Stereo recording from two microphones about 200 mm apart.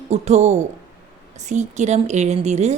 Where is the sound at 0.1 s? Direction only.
35° right (ahead or behind).